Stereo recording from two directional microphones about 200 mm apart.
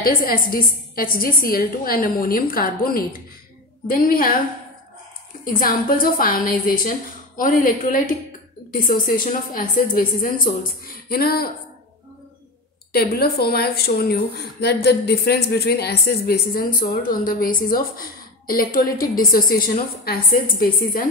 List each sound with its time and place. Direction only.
0.0 s speech: 45° left (ahead or behind)
5.4 s speech: 45° left (ahead or behind)
12.9 s speech: 50° left (ahead or behind)